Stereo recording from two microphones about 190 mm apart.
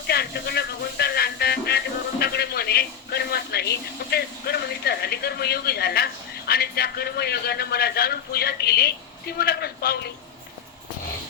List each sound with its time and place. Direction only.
0.1 s a man's voice: 55° left (ahead or behind)